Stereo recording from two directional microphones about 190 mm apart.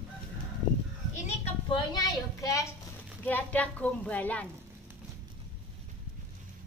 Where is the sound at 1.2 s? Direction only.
25° left (ahead or behind); by 4.5 s 10° left (ahead or behind).